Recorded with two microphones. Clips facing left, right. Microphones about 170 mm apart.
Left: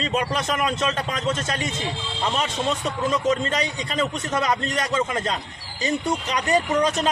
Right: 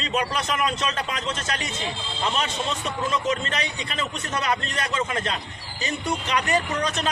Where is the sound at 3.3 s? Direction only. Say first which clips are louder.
Left 4 dB; 35° left (ahead or behind).